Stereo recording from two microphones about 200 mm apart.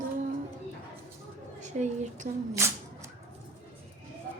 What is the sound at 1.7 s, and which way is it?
Speech, 35° right (ahead or behind).